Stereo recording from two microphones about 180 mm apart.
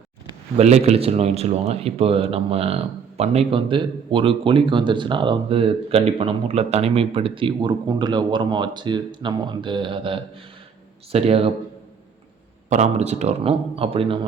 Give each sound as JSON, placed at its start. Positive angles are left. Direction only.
{"t": 0.5, "sound": "speech", "side_deg": -35}
{"t": 12.7, "sound": "speech", "side_deg": -35}